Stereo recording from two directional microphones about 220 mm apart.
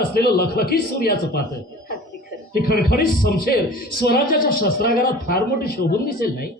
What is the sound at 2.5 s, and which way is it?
A man's voice, 45° left (ahead or behind).